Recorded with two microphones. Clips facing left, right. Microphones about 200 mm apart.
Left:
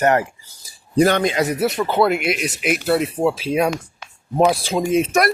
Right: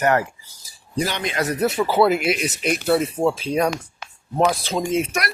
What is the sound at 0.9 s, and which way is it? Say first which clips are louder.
Speech: left 9 dB; 55° left (ahead or behind).